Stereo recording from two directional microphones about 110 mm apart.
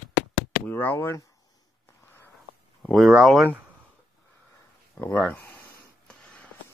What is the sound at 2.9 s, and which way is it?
Speech, centre (ahead or behind).